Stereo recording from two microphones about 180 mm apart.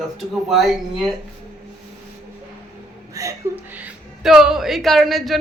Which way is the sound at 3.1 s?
15° right (ahead or behind).